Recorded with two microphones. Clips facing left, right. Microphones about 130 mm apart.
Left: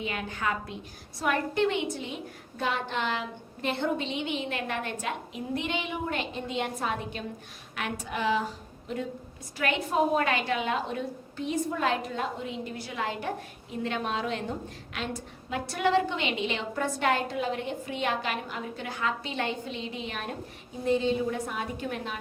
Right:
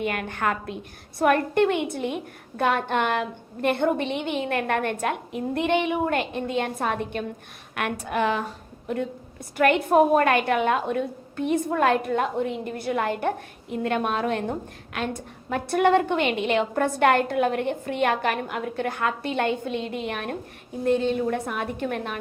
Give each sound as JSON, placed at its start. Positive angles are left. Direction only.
{"t": 0.0, "sound": "a woman's voice", "side_deg": -60}